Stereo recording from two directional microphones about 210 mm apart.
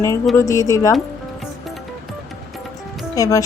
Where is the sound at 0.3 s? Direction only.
15° left (ahead or behind).